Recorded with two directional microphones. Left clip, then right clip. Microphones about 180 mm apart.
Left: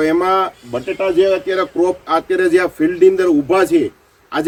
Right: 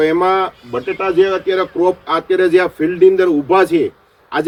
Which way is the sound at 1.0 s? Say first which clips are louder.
Left 1 dB; 15° left (ahead or behind).